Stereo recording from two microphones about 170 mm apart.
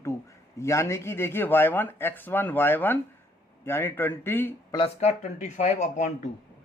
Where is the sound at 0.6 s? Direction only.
15° left (ahead or behind).